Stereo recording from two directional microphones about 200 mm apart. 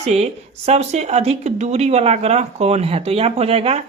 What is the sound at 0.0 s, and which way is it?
Speech, 30° right (ahead or behind).